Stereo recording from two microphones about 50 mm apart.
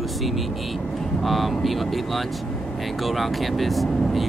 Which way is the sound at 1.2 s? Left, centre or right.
Centre.